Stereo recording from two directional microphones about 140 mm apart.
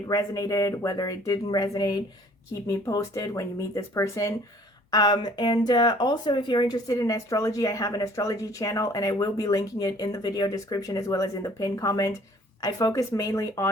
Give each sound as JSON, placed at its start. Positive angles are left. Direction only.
{"t": 0.1, "sound": "speech", "side_deg": 25}